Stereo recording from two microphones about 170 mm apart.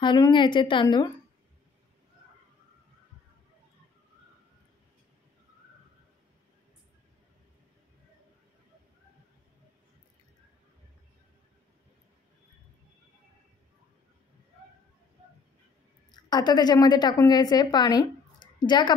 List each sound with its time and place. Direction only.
0.0 s a woman's voice: 25° left (ahead or behind)
16.1 s a woman's voice: 25° left (ahead or behind)